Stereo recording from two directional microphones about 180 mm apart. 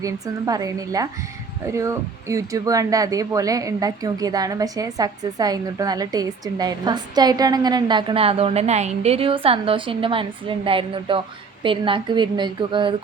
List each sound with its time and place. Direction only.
0.0 s speech: 20° right (ahead or behind)